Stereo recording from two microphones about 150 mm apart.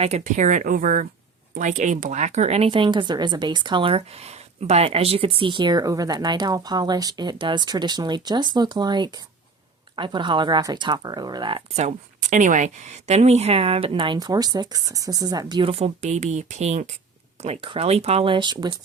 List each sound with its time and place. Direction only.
0.0 s speech: 50° right (ahead or behind); by 11.6 s 30° right (ahead or behind)
11.8 s speech: 55° right (ahead or behind); by 18.7 s 30° right (ahead or behind)